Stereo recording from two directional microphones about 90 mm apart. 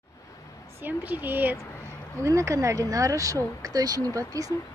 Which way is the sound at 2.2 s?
35° right (ahead or behind).